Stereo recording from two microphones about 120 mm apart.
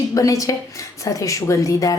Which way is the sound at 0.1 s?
25° left (ahead or behind).